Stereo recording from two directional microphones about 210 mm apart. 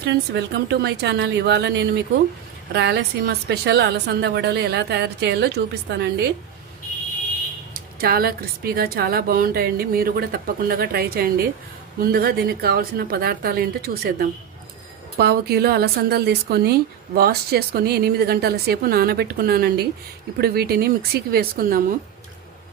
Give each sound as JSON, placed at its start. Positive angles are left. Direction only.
{"t": 0.0, "sound": "a woman's voice", "side_deg": -50}
{"t": 8.0, "sound": "a woman's voice", "side_deg": -45}